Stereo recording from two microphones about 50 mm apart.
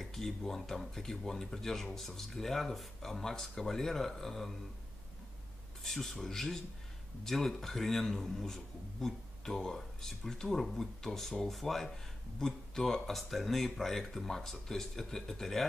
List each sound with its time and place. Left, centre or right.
0.0 s speech: centre
5.8 s speech: centre